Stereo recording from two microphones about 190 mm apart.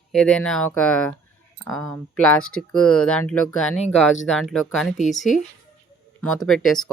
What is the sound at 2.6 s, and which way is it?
Speech, 5° left (ahead or behind).